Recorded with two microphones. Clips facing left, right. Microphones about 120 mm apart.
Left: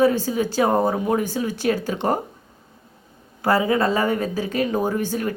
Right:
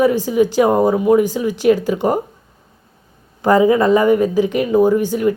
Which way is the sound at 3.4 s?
20° right (ahead or behind).